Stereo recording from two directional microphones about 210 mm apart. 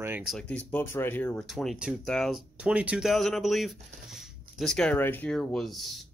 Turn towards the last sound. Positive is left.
turn(degrees=0)  # may be behind; listen again after turning